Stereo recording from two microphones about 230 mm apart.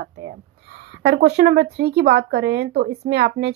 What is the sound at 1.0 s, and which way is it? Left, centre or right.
A woman's voice, right.